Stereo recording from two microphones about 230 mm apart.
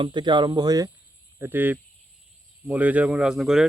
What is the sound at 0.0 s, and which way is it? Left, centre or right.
Speech, centre.